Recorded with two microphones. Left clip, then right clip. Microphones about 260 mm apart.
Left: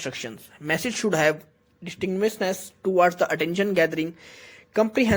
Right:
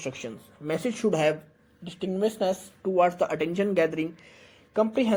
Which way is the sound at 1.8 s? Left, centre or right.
Left.